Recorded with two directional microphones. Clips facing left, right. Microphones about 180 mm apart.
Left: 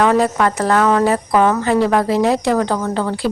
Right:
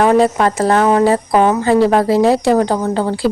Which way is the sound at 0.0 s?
25° right (ahead or behind).